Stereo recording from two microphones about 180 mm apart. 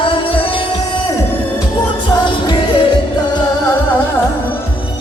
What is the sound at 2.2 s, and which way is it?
Music, 25° left (ahead or behind).